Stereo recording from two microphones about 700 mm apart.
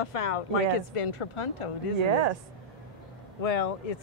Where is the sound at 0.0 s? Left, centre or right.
Left.